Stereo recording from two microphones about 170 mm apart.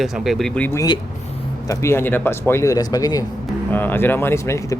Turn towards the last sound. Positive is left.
turn(degrees=20)  # may be behind; listen again after turning